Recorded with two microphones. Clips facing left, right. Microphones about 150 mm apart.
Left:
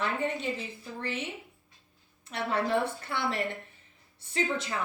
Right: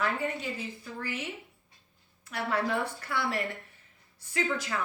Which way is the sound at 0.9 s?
25° left (ahead or behind).